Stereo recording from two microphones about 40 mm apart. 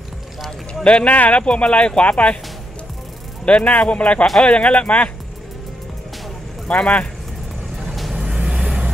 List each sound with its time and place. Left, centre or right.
0.8 s speech: left
1.1 s speech: left
1.4 s speech: left
3.4 s speech: left
6.7 s speech: left
7.8 s vehicle: centre
8.2 s vehicle: centre